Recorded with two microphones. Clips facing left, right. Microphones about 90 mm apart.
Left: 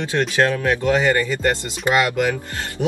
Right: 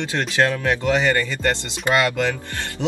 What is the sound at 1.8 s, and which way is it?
Speech, 15° left (ahead or behind).